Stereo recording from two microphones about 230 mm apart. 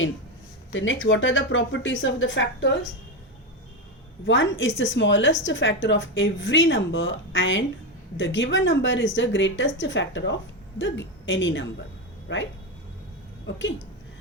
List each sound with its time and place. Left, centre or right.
0.7 s a woman's voice: left
4.3 s a woman's voice: left
13.6 s a woman's voice: left